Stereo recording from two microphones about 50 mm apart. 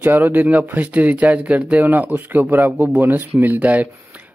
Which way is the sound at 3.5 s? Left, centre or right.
Right.